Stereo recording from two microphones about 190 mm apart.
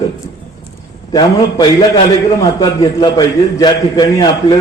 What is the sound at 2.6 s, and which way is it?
A man's voice, 20° left (ahead or behind).